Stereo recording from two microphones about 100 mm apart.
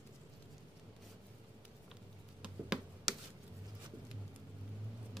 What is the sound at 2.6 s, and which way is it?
Tick-tock, 10° right (ahead or behind).